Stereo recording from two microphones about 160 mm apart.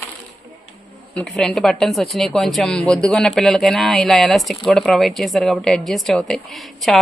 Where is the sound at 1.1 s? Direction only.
5° left (ahead or behind).